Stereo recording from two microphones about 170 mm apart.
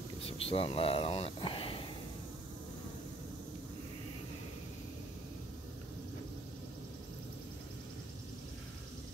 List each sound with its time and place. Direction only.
0.3 s speech: 35° left (ahead or behind)